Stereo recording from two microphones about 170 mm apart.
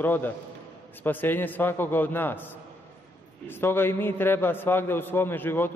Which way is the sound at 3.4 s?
15° left (ahead or behind).